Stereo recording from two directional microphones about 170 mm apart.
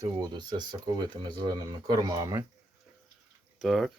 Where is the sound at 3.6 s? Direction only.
Centre (ahead or behind).